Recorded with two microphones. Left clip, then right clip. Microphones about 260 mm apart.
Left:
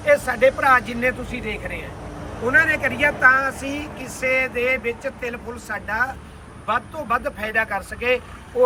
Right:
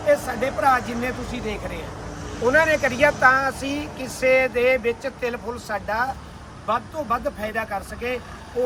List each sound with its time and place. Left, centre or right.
0.1 s speech: centre; by 6.1 s right
6.7 s speech: centre